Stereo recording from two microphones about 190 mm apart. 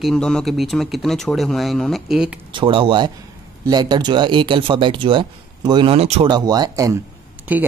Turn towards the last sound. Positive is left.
turn(degrees=-10)  # may be behind; listen again after turning